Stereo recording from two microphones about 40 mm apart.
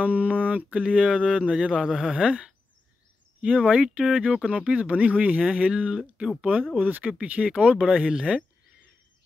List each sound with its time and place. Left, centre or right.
0.0 s mantra: right
0.7 s speech: right; by 2.1 s centre
2.1 s speech: right
6.8 s speech: right
7.2 s speech: right